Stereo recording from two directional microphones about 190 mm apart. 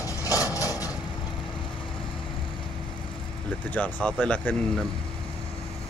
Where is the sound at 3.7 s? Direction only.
10° left (ahead or behind).